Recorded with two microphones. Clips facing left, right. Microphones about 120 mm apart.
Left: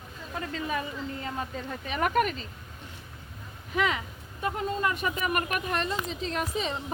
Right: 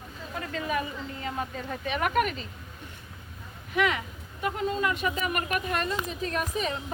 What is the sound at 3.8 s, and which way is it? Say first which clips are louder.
Speech: right 1 dB; 30° left (ahead or behind).